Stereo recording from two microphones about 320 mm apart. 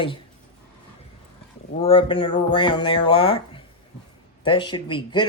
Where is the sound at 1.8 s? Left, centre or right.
Centre.